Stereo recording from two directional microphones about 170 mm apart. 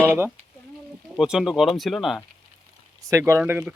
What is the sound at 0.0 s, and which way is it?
Speech, 15° right (ahead or behind).